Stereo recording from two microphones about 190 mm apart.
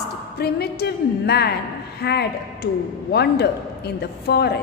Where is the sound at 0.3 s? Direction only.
55° left (ahead or behind).